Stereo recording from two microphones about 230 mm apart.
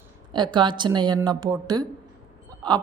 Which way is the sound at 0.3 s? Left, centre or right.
Centre.